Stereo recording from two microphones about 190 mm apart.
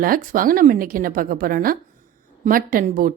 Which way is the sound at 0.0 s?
50° right (ahead or behind).